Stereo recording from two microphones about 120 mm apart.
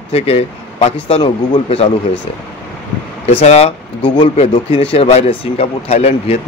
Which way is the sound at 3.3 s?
60° left (ahead or behind).